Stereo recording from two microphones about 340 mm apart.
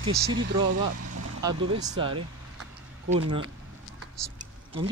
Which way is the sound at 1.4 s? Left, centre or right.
Centre.